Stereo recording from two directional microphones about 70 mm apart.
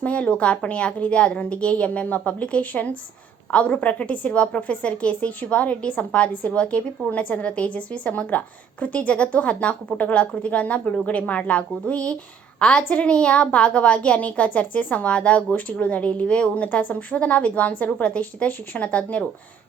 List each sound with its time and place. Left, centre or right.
0.0 s a woman's voice: centre